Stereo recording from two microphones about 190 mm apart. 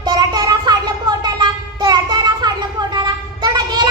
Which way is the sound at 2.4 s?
20° right (ahead or behind).